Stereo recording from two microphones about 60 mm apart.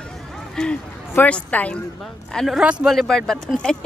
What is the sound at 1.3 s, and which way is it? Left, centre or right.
Speech, left.